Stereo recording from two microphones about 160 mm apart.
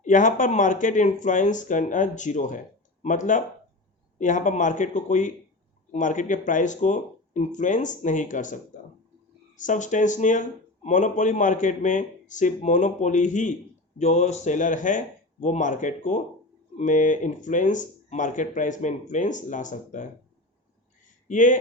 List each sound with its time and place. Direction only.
0.0 s speech: 50° left (ahead or behind)
9.6 s speech: 50° left (ahead or behind)
21.2 s speech: 55° left (ahead or behind)